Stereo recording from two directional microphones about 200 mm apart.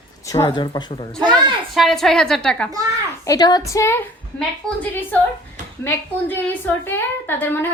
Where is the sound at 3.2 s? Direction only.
20° left (ahead or behind).